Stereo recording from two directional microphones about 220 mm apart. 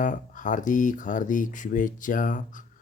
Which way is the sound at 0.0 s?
35° left (ahead or behind).